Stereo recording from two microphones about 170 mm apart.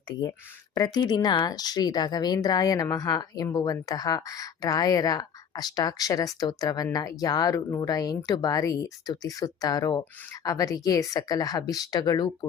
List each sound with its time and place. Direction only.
0.2 s speech: 20° left (ahead or behind)